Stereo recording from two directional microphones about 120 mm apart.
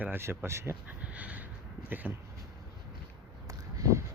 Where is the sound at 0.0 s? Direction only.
20° right (ahead or behind).